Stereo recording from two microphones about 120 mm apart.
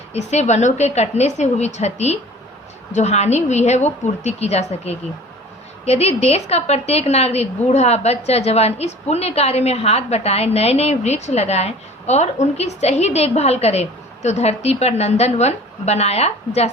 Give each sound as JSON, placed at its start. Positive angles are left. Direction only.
{"t": 0.1, "sound": "a woman's voice", "side_deg": 70}